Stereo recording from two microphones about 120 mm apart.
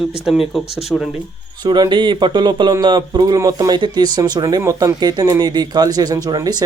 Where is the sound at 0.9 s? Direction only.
5° left (ahead or behind).